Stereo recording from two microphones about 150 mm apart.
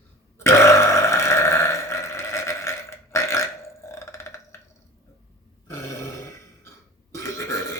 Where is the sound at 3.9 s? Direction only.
20° left (ahead or behind).